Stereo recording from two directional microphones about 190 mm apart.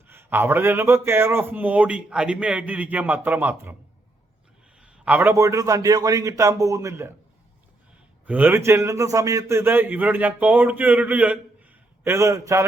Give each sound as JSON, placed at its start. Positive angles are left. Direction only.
{"t": 0.1, "sound": "a man's voice", "side_deg": -10}
{"t": 4.8, "sound": "a man's voice", "side_deg": -10}
{"t": 8.3, "sound": "a man's voice", "side_deg": -10}